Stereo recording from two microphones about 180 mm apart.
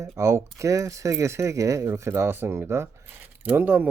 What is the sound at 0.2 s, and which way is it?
Speech, 15° right (ahead or behind).